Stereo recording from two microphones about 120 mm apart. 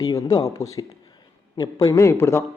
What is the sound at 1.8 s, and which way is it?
Speech, 25° left (ahead or behind).